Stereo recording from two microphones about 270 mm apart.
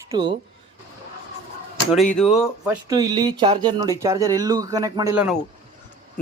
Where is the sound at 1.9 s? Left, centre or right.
Centre.